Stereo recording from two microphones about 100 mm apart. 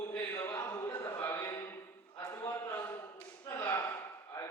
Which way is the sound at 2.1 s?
40° left (ahead or behind).